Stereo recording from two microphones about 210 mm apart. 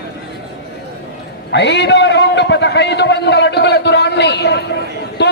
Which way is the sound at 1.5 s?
55° left (ahead or behind).